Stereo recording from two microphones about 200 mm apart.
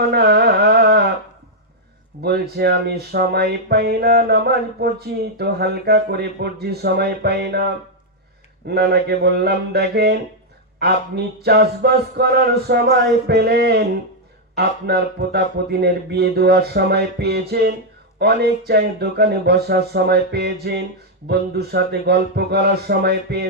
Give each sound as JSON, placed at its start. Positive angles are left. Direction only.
{"t": 0.1, "sound": "carnatic music", "side_deg": -55}
{"t": 2.2, "sound": "speech", "side_deg": -55}
{"t": 8.6, "sound": "speech", "side_deg": -50}